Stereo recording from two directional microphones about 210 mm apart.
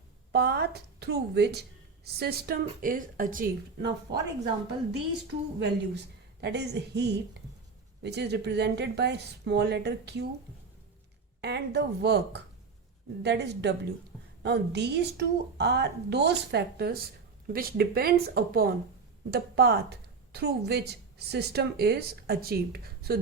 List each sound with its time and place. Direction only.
0.3 s a woman's voice: 50° right (ahead or behind)
11.3 s a woman's voice: 55° right (ahead or behind)